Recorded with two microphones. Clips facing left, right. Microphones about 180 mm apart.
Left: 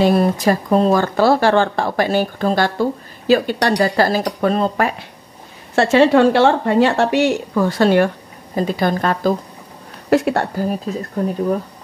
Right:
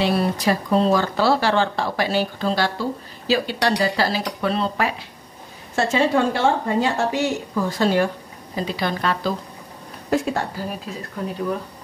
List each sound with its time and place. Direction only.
0.0 s speech: 45° left (ahead or behind)
5.8 s speech: 75° left (ahead or behind)
8.5 s speech: 50° left (ahead or behind)
10.0 s a woman's voice: 70° left (ahead or behind)